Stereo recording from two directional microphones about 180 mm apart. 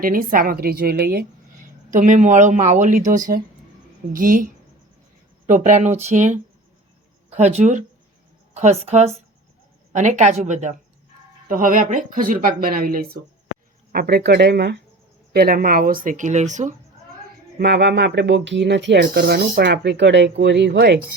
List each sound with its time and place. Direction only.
0.0 s a woman's voice: 50° right (ahead or behind)
17.6 s speech: 70° right (ahead or behind)
19.0 s speech: 55° right (ahead or behind)